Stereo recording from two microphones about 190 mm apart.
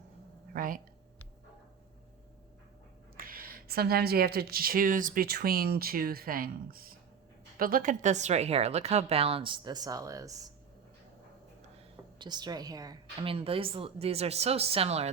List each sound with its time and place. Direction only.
0.5 s speech: 45° right (ahead or behind)
3.2 s a woman's voice: 50° right (ahead or behind); by 10.5 s 15° right (ahead or behind)
11.8 s a woman's voice: 25° right (ahead or behind)